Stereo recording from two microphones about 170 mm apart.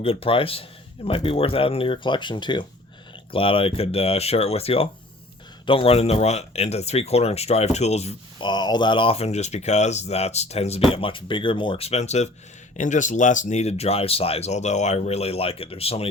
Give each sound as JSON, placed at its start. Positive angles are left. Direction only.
{"t": 0.0, "sound": "speech", "side_deg": 35}
{"t": 8.4, "sound": "speech", "side_deg": 25}